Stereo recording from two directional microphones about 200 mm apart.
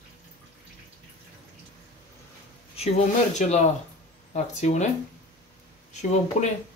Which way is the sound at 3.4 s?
40° left (ahead or behind).